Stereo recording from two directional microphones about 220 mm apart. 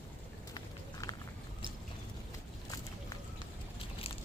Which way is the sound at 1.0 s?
15° left (ahead or behind).